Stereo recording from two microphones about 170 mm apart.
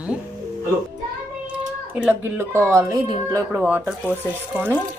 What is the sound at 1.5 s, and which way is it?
Speech, 10° right (ahead or behind).